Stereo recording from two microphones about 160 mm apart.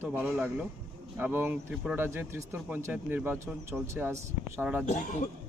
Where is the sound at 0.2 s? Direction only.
5° right (ahead or behind).